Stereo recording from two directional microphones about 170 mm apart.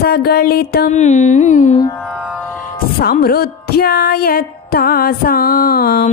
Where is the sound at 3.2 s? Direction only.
65° left (ahead or behind).